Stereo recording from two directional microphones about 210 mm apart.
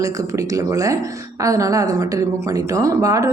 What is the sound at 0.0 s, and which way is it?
A woman's voice, 15° right (ahead or behind).